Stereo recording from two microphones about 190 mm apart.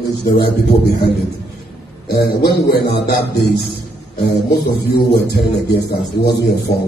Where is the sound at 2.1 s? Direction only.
55° left (ahead or behind).